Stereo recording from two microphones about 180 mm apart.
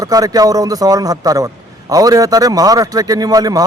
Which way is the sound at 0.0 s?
20° right (ahead or behind).